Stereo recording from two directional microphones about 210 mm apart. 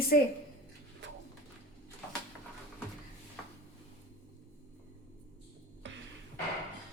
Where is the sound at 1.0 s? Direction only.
60° right (ahead or behind).